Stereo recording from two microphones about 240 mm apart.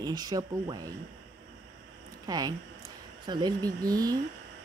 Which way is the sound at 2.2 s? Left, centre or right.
Centre.